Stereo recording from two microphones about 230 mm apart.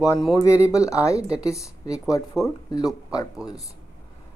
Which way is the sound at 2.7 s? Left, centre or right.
Centre.